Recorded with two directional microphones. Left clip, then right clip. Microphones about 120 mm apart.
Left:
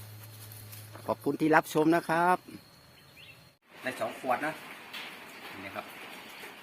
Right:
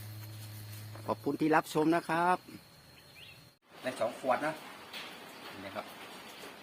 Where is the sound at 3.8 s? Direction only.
30° right (ahead or behind).